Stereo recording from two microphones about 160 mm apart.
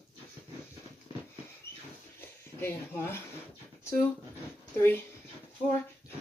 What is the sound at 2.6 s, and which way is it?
Speech, 15° left (ahead or behind).